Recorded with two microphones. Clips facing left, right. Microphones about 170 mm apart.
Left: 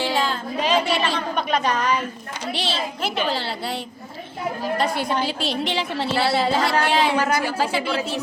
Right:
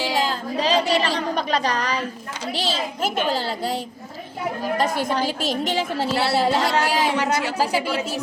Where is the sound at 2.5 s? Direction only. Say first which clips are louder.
Right 1 dB; 40° right (ahead or behind).